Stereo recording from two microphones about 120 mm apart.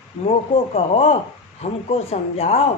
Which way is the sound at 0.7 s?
65° left (ahead or behind).